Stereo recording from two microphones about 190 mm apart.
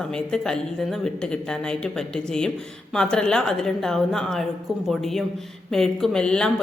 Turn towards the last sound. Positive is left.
turn(degrees=5)  # may be behind; listen again after turning